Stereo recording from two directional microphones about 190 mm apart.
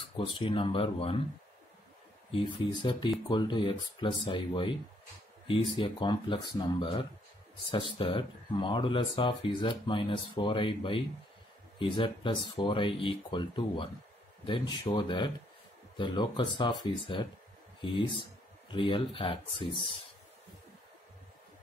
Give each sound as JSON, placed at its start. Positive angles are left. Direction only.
{"t": 0.2, "sound": "speech", "side_deg": 30}
{"t": 2.3, "sound": "speech", "side_deg": 25}